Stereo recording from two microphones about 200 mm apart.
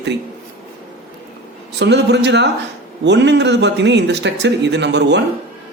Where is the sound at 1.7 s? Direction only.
60° right (ahead or behind).